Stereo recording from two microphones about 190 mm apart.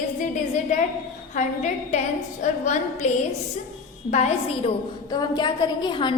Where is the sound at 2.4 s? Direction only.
40° left (ahead or behind).